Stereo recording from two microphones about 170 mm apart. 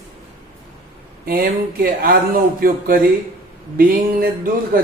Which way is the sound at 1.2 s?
60° right (ahead or behind).